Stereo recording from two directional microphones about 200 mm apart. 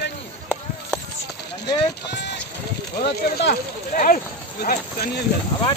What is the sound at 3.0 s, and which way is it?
Speech, 50° left (ahead or behind).